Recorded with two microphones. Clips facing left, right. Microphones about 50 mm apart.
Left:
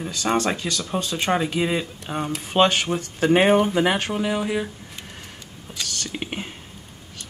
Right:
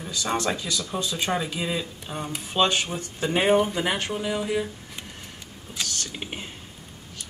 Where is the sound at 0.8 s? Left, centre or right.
Left.